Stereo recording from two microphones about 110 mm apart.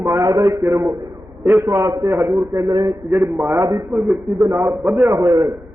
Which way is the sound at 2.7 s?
35° right (ahead or behind).